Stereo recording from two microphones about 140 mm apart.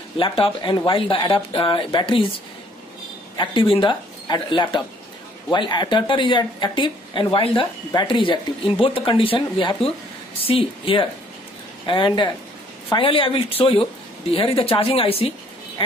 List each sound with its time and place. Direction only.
0.2 s speech: 35° left (ahead or behind)
3.3 s speech: 40° left (ahead or behind)